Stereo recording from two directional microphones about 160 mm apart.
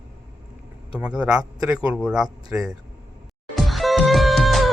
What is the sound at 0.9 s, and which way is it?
A man's voice, 5° right (ahead or behind).